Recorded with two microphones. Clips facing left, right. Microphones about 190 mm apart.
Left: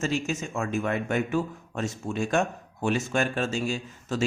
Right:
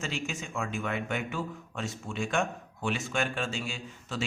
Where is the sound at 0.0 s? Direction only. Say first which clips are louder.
Left 7 dB; 40° left (ahead or behind).